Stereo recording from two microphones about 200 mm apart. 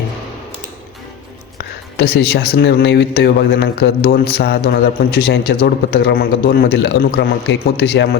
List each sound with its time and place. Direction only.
2.0 s a man's voice: 55° left (ahead or behind)